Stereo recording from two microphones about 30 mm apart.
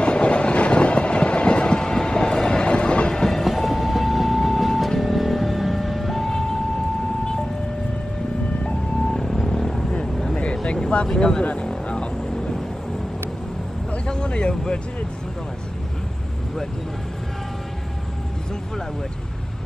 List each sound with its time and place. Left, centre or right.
0.0 s train: left; by 2.6 s centre
2.6 s train: left
3.1 s train: centre
3.4 s vehicle: centre
9.2 s vehicle: centre
10.3 s vehicle: left
11.1 s speech: left
11.6 s vehicle: left
14.0 s a sound: left